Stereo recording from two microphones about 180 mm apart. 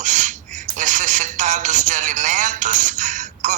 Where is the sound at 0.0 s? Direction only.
45° right (ahead or behind).